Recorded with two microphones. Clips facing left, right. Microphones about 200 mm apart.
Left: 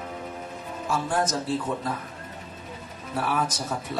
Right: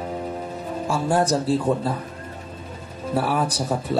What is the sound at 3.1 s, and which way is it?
Speech, 30° right (ahead or behind).